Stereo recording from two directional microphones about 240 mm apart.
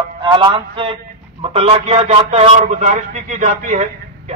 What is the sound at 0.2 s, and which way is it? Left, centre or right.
A man's voice, centre.